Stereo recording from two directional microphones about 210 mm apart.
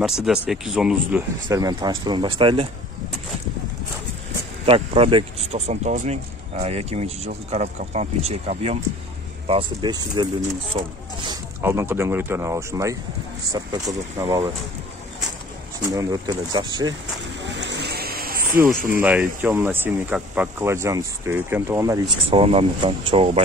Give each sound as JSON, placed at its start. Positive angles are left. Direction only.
{"t": 0.0, "sound": "speech", "side_deg": 0}
{"t": 1.5, "sound": "speech", "side_deg": -20}
{"t": 4.6, "sound": "speech", "side_deg": -25}
{"t": 14.1, "sound": "speech", "side_deg": -15}
{"t": 15.9, "sound": "speech", "side_deg": -15}
{"t": 17.4, "sound": "a sound", "side_deg": -55}
{"t": 18.9, "sound": "speech", "side_deg": -5}
{"t": 22.3, "sound": "speech", "side_deg": -25}